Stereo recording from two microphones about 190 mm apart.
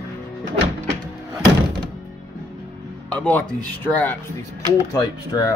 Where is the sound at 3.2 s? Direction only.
10° left (ahead or behind).